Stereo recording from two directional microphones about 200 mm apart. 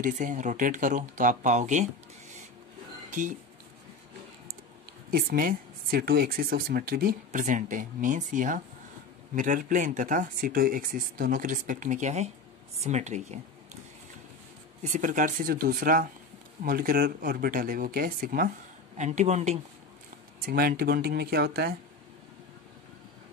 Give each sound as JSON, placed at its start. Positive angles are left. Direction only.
{"t": 0.0, "sound": "speech", "side_deg": -40}
{"t": 3.1, "sound": "speech", "side_deg": -40}
{"t": 5.1, "sound": "speech", "side_deg": -45}
{"t": 14.8, "sound": "speech", "side_deg": -40}
{"t": 20.4, "sound": "speech", "side_deg": -50}